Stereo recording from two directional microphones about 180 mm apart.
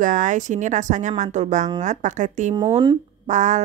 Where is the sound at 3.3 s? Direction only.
40° right (ahead or behind).